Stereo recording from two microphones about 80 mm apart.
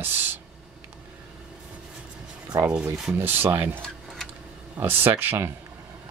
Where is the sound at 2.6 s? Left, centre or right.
Centre.